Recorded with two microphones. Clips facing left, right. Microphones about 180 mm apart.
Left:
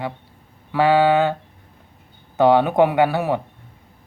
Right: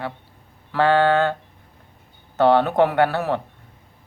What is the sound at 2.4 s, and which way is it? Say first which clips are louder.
Speech: left 1 dB; 10° left (ahead or behind).